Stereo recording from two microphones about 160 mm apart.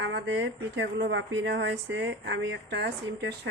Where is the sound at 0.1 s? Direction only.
90° right.